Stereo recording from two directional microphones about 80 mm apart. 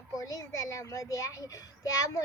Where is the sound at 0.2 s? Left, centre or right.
Left.